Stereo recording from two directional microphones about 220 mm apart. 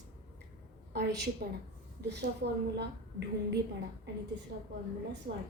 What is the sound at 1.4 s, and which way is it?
A woman's voice, 45° right (ahead or behind).